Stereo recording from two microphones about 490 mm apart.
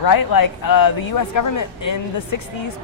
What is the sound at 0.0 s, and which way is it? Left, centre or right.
A man's voice, left.